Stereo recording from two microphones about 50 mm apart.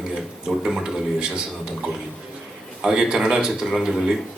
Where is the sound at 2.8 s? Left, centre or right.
Centre.